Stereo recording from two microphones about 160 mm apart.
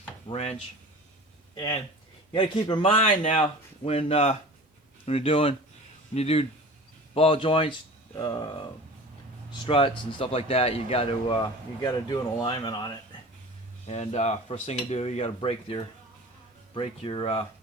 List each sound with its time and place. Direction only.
0.3 s speech: 40° left (ahead or behind)
1.5 s speech: 25° left (ahead or behind)
8.1 s speech: 25° left (ahead or behind)
13.8 s speech: 45° left (ahead or behind)